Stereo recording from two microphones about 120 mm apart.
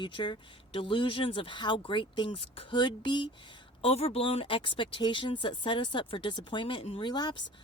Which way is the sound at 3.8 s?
60° left (ahead or behind).